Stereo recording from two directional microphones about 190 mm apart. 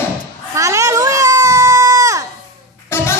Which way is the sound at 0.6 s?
15° right (ahead or behind).